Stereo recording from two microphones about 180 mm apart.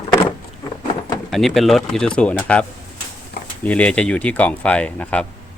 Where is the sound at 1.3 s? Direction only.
Centre (ahead or behind).